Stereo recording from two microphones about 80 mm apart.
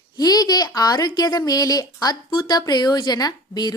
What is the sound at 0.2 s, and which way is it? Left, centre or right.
A woman's voice, left.